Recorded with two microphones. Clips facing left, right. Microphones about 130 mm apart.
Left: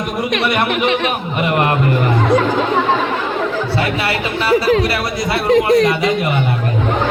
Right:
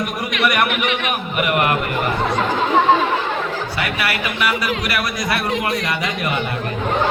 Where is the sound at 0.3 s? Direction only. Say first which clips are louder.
Left 1 dB; 30° left (ahead or behind).